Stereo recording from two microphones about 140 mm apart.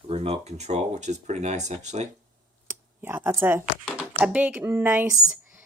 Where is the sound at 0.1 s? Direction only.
45° right (ahead or behind).